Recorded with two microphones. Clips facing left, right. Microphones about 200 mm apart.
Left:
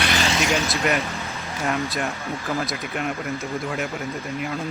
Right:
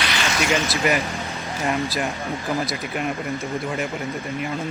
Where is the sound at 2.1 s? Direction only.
15° right (ahead or behind).